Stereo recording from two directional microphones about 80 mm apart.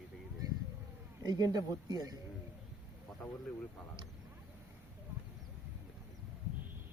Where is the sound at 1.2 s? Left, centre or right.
Right.